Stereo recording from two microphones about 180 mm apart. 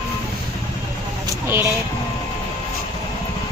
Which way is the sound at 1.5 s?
10° right (ahead or behind).